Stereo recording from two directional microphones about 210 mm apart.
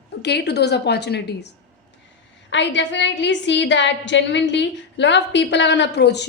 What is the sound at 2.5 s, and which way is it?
A woman's voice, 60° left (ahead or behind).